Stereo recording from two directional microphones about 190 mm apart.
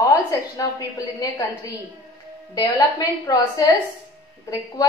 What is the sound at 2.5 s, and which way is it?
A woman's voice, 20° left (ahead or behind).